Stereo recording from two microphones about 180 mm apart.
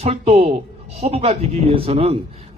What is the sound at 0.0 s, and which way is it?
A man's voice, 35° right (ahead or behind).